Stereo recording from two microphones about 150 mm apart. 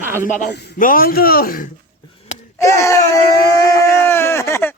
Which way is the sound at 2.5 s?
20° left (ahead or behind).